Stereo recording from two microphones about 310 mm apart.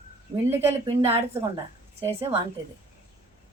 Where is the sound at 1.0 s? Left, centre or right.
Centre.